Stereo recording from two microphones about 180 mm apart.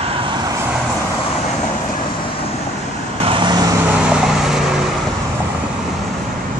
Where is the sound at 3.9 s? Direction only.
5° right (ahead or behind).